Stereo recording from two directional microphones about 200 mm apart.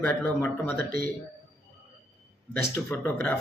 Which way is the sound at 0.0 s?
10° left (ahead or behind).